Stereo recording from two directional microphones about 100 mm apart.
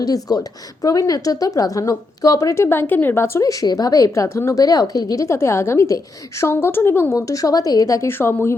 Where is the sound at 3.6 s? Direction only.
40° left (ahead or behind); by 7.1 s 20° left (ahead or behind).